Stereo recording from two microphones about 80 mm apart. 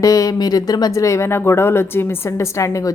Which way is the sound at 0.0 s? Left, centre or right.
Left.